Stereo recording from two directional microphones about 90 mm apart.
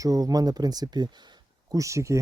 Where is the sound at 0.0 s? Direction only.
40° right (ahead or behind).